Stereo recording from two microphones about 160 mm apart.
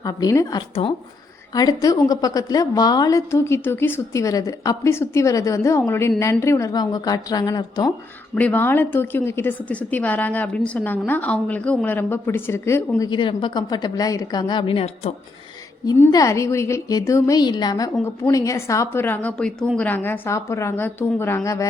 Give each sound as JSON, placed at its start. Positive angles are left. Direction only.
{"t": 0.0, "sound": "a woman's voice", "side_deg": 25}
{"t": 8.4, "sound": "speech", "side_deg": 10}
{"t": 13.0, "sound": "a woman's voice", "side_deg": 30}
{"t": 15.9, "sound": "a woman's voice", "side_deg": 20}